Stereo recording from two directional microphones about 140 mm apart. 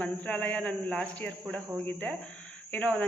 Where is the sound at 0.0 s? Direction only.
10° left (ahead or behind).